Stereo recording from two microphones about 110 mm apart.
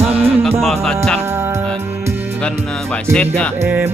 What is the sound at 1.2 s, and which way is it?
Music, 25° right (ahead or behind).